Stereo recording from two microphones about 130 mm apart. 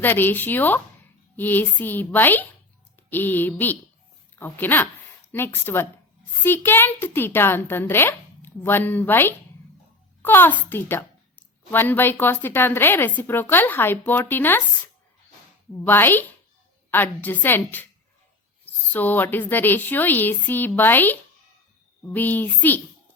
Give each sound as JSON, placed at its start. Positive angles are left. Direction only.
{"t": 0.0, "sound": "a child's voice", "side_deg": 15}
{"t": 15.9, "sound": "a child's voice", "side_deg": 15}
{"t": 18.9, "sound": "a child's voice", "side_deg": 15}